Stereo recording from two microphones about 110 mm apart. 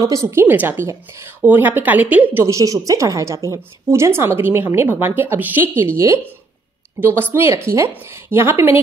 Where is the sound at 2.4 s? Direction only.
30° right (ahead or behind).